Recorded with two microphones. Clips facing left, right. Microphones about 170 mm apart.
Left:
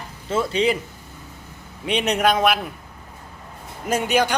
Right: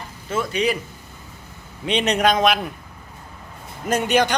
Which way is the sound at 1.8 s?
5° left (ahead or behind).